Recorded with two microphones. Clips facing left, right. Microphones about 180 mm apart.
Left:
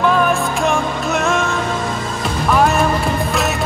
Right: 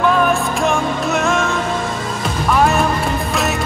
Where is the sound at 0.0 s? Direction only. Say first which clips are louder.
Even; centre (ahead or behind).